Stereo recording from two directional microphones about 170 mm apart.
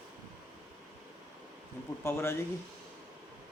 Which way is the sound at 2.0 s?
15° left (ahead or behind).